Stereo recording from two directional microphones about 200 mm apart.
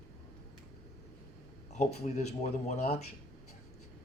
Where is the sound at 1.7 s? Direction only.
35° left (ahead or behind).